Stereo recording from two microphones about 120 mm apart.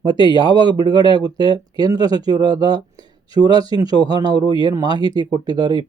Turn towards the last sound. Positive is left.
turn(degrees=-35)  # may be behind; listen again after turning